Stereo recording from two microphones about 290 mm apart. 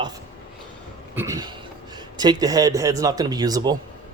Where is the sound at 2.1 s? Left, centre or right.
Centre.